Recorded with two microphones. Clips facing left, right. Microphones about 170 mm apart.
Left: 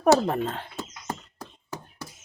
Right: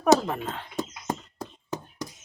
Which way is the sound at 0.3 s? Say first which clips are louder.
Left 4 dB; 40° left (ahead or behind).